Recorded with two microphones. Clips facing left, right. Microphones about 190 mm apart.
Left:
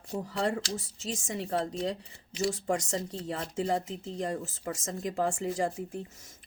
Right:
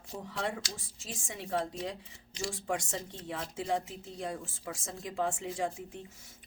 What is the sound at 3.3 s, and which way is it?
Speech, 40° left (ahead or behind).